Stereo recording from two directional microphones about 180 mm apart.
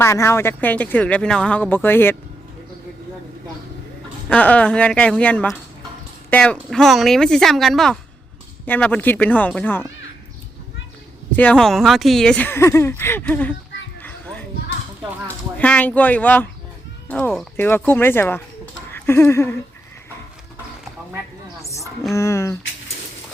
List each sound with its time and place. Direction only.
0.0 s speech: 15° left (ahead or behind)
4.3 s speech: 10° left (ahead or behind)
11.3 s speech: 5° left (ahead or behind)
14.0 s children playing: 10° left (ahead or behind)
15.5 s speech: 5° left (ahead or behind)
21.6 s a sound: 15° left (ahead or behind)
22.1 s speech: 15° left (ahead or behind)